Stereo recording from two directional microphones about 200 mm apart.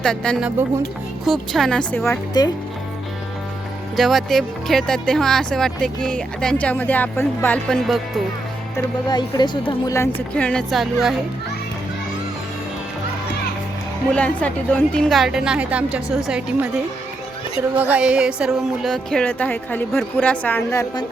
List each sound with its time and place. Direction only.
0.0 s a woman's voice: 5° left (ahead or behind)
2.4 s speech: 20° left (ahead or behind)
3.9 s speech: centre (ahead or behind)
9.0 s a woman's voice: 20° left (ahead or behind); by 10.8 s centre (ahead or behind)
14.1 s speech: 5° left (ahead or behind)
17.7 s a woman's voice: 5° right (ahead or behind); by 21.0 s 15° left (ahead or behind)